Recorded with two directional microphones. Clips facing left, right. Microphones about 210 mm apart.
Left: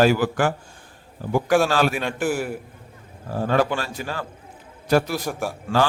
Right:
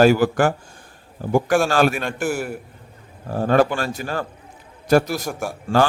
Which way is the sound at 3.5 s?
50° right (ahead or behind).